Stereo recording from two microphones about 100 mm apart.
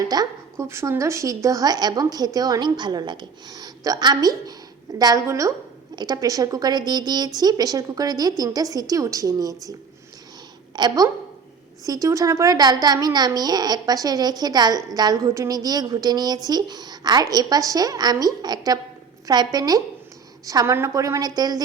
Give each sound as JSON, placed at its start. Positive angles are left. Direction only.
{"t": 0.1, "sound": "a woman's voice", "side_deg": -40}
{"t": 0.5, "sound": "a woman's voice", "side_deg": -25}
{"t": 10.8, "sound": "a woman's voice", "side_deg": -40}